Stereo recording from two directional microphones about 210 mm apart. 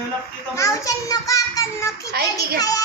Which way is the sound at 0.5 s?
15° left (ahead or behind).